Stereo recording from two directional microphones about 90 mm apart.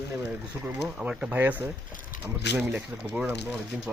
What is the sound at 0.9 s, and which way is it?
Speech, 5° right (ahead or behind).